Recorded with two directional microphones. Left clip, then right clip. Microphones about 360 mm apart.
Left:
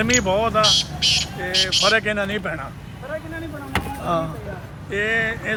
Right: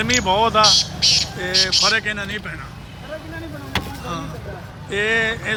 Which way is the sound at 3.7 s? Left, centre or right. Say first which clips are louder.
Left 4 dB; centre.